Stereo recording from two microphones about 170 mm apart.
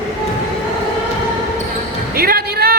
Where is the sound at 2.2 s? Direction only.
65° right (ahead or behind).